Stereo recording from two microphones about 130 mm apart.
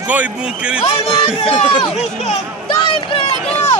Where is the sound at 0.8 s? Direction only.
40° left (ahead or behind).